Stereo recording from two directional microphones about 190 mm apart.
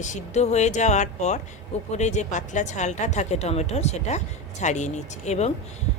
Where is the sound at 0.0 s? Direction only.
40° left (ahead or behind).